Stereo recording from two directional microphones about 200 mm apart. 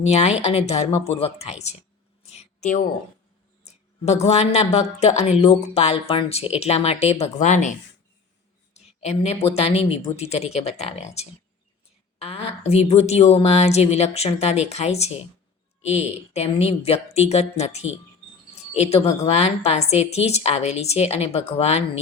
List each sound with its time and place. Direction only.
0.0 s a woman's voice: 35° left (ahead or behind)
2.2 s a sound: 35° left (ahead or behind)
3.7 s a woman's voice: 35° left (ahead or behind)